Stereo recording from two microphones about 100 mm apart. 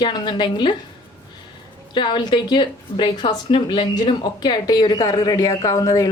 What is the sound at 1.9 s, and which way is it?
A woman's voice, 50° left (ahead or behind).